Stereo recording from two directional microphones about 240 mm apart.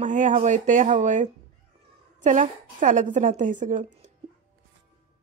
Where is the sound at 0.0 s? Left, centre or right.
Right.